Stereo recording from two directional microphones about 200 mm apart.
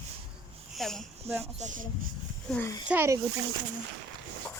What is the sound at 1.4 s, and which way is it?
Speech, 35° right (ahead or behind).